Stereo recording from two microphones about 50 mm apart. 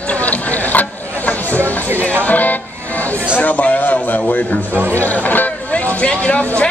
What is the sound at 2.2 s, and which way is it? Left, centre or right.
A man's voice, left.